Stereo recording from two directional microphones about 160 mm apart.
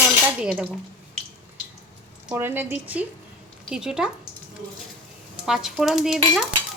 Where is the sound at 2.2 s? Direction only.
15° right (ahead or behind).